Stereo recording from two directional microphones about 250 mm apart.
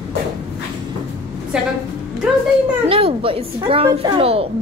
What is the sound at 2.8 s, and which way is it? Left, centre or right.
A child's voice, right.